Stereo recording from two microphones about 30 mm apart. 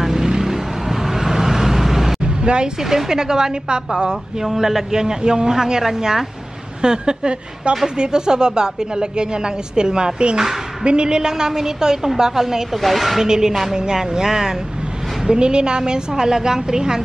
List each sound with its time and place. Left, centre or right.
0.0 s vehicle: centre
2.2 s a sound: right
2.8 s a woman's voice: centre
4.5 s a woman's voice: centre
12.7 s a woman's voice: centre
13.2 s a woman's voice: centre
15.2 s a woman's voice: right